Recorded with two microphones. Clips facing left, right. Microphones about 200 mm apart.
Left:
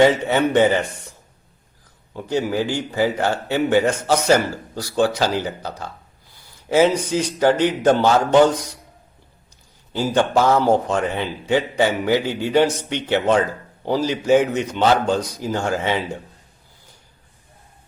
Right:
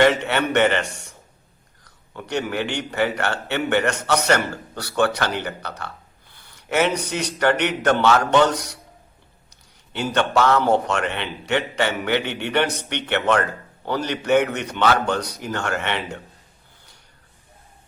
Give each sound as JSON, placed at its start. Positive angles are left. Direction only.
{"t": 0.0, "sound": "a man's voice", "side_deg": -70}
{"t": 2.2, "sound": "a man's voice", "side_deg": -70}
{"t": 10.1, "sound": "a man's voice", "side_deg": -70}
{"t": 10.4, "sound": "a man's voice", "side_deg": 10}
{"t": 10.7, "sound": "a man's voice", "side_deg": -75}